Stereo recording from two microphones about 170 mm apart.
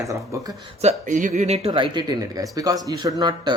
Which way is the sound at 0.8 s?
50° right (ahead or behind).